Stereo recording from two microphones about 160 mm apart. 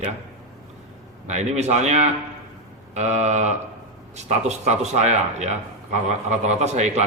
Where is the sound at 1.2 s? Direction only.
45° right (ahead or behind).